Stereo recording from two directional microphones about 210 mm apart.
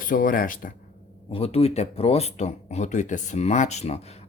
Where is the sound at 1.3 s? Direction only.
30° left (ahead or behind).